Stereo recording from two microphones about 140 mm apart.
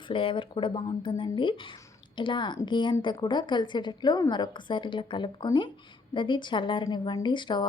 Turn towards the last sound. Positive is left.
turn(degrees=35)  # may be behind; listen again after turning